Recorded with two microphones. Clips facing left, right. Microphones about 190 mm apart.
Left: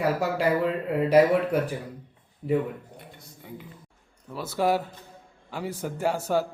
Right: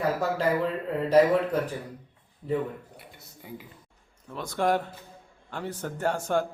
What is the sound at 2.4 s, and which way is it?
Speech, 15° left (ahead or behind).